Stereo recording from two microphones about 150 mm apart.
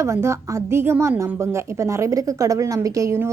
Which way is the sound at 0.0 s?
20° right (ahead or behind).